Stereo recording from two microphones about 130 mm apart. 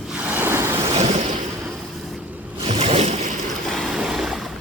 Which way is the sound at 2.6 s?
50° right (ahead or behind).